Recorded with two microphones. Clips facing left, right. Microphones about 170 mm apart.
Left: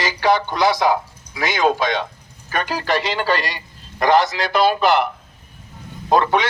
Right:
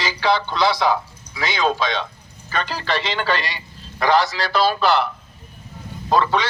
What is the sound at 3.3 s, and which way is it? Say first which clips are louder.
A man's voice: left 2 dB; 40° left (ahead or behind).